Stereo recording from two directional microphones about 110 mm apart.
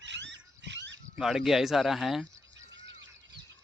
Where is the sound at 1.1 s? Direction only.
5° right (ahead or behind).